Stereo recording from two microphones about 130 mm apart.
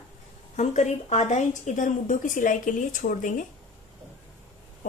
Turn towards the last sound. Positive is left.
turn(degrees=85)